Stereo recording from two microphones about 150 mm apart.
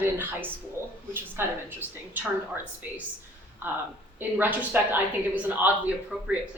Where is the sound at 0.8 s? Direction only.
15° right (ahead or behind).